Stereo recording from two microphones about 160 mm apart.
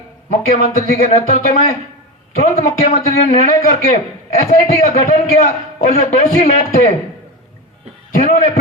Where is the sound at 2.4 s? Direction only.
40° left (ahead or behind).